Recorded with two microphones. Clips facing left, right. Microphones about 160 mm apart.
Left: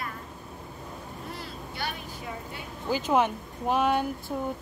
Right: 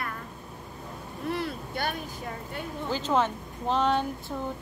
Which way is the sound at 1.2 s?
60° right (ahead or behind).